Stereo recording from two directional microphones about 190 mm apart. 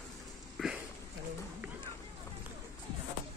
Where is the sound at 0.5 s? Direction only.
5° right (ahead or behind).